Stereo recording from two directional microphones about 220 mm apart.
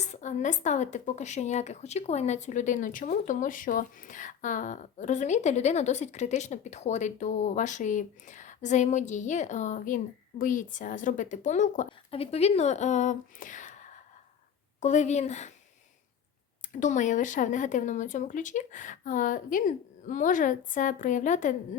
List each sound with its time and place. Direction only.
0.0 s speech: 30° left (ahead or behind)
16.8 s speech: 35° left (ahead or behind)